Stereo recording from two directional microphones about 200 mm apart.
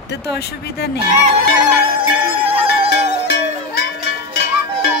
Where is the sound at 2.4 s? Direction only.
30° right (ahead or behind).